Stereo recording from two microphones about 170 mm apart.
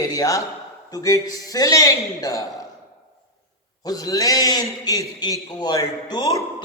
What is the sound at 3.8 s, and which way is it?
Speech, 20° left (ahead or behind).